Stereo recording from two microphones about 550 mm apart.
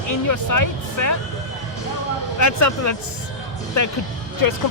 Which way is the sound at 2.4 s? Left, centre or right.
Left.